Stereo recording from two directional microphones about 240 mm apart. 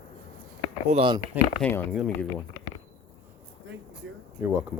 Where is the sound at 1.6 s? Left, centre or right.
Centre.